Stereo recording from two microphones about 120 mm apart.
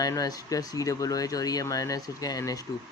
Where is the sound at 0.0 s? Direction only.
30° left (ahead or behind).